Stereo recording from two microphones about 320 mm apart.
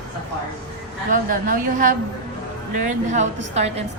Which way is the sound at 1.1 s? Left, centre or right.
Right.